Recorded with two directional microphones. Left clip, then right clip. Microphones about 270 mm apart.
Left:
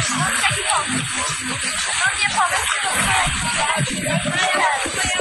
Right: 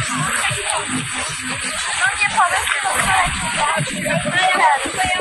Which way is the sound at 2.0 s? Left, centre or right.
Centre.